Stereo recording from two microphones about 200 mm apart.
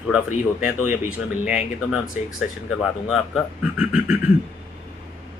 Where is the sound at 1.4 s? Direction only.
35° left (ahead or behind).